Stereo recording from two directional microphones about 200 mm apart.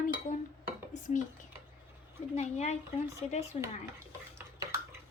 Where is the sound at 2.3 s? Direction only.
35° left (ahead or behind).